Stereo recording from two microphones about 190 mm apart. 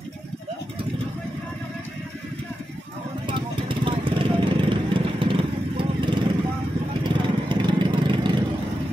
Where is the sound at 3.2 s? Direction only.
25° right (ahead or behind).